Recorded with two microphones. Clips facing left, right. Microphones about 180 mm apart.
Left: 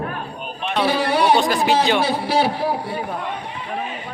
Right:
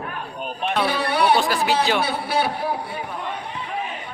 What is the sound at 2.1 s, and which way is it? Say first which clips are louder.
Speech: left 4 dB; 30° left (ahead or behind).